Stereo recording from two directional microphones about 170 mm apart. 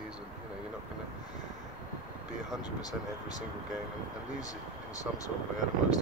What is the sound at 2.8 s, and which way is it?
Speech, 20° left (ahead or behind).